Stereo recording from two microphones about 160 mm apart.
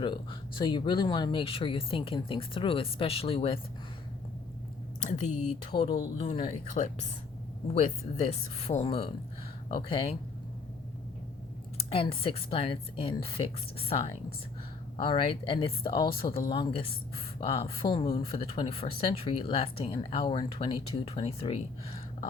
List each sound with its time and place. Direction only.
0.0 s a woman's voice: 30° left (ahead or behind)
5.7 s a woman's voice: 30° left (ahead or behind)
6.8 s a woman's voice: 45° left (ahead or behind)
11.9 s a woman's voice: 35° left (ahead or behind)